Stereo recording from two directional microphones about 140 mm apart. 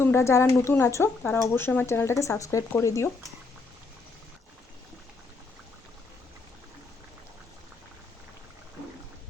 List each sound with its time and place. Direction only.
0.0 s speech: 20° left (ahead or behind)